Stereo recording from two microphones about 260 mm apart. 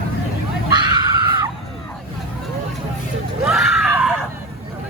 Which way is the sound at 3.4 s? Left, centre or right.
Centre.